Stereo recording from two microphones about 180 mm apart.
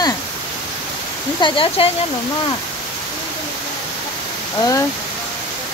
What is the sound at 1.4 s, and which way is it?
Speech, 30° left (ahead or behind).